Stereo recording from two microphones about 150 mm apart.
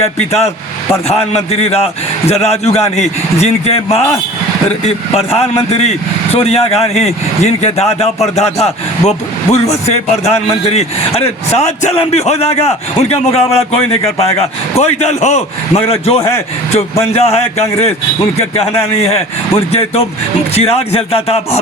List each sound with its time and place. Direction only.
0.2 s speech: 45° left (ahead or behind)